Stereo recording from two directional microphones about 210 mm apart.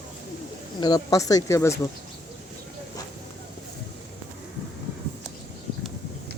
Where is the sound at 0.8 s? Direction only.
20° left (ahead or behind).